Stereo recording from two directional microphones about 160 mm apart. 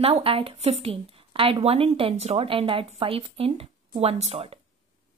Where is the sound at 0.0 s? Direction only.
35° right (ahead or behind).